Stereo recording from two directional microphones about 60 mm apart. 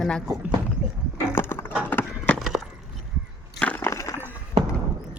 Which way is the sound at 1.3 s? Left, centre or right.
Left.